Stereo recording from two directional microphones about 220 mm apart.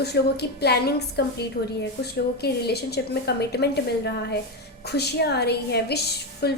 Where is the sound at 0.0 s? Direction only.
50° left (ahead or behind).